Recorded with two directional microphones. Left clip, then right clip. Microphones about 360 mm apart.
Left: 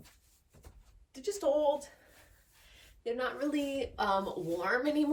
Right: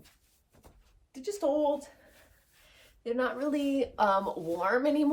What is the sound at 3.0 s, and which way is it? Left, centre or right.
Speech, centre.